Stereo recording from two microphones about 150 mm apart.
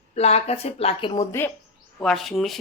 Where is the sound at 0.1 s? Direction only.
45° left (ahead or behind).